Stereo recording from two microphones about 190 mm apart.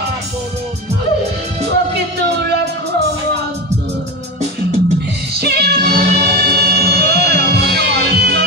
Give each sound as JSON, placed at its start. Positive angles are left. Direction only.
{"t": 1.7, "sound": "music", "side_deg": -60}
{"t": 5.4, "sound": "music", "side_deg": -60}